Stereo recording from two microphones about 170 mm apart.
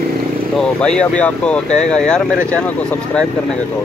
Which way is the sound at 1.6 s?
45° left (ahead or behind).